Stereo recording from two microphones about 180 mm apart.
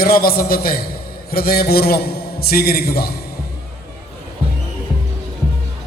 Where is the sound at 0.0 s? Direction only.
55° left (ahead or behind).